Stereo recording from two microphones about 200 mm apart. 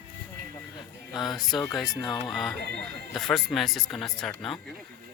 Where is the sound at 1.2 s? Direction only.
20° left (ahead or behind).